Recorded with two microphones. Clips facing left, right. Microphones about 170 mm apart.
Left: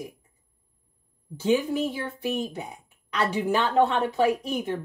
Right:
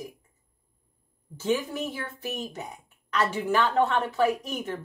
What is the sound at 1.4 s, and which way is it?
Speech, 10° left (ahead or behind).